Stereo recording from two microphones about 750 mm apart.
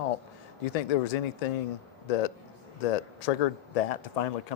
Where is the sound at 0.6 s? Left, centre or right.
Left.